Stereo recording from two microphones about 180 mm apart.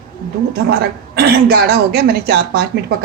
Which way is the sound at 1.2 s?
60° right (ahead or behind).